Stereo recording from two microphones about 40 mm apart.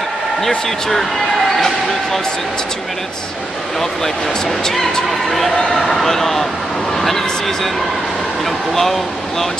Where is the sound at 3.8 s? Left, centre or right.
Centre.